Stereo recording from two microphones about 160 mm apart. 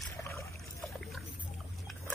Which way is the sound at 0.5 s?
Centre (ahead or behind).